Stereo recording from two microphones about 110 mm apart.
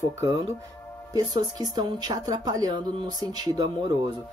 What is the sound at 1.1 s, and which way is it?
Speech, 35° right (ahead or behind).